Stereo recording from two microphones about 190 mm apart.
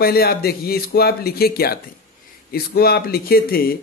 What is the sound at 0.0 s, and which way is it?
Speech, 55° left (ahead or behind).